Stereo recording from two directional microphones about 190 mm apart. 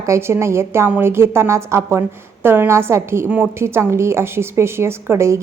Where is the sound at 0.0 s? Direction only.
15° right (ahead or behind).